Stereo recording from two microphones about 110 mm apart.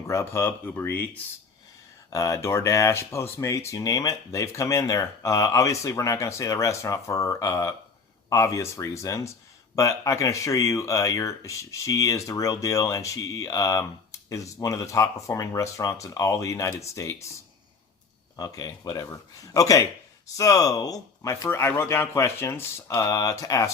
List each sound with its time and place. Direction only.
0.1 s speech: 25° left (ahead or behind)
2.1 s speech: 30° left (ahead or behind)
18.3 s speech: 35° left (ahead or behind)